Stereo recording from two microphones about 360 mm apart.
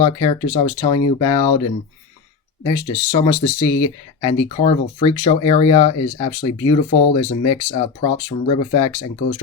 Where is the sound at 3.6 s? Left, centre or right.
Left.